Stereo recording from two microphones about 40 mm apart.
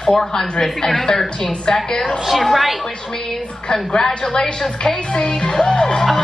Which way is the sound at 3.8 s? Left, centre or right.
Centre.